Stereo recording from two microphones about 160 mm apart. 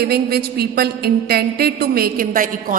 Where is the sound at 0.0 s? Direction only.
80° right.